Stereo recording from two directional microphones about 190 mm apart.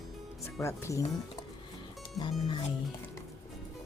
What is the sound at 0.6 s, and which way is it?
Speech, 15° left (ahead or behind).